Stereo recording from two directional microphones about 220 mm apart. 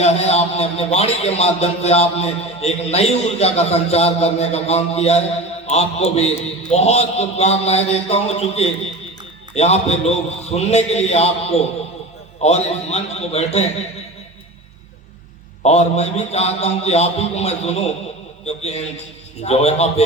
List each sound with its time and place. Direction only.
0.0 s a man's voice: 30° left (ahead or behind)
15.6 s a man's voice: 30° left (ahead or behind)